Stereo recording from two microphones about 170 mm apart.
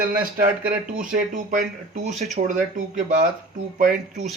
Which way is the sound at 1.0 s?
50° right (ahead or behind).